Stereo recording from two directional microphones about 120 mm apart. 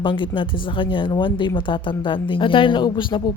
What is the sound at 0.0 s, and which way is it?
Speech, 45° left (ahead or behind).